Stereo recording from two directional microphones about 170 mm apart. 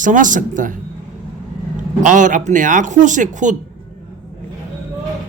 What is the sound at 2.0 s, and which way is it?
Speech, 50° right (ahead or behind).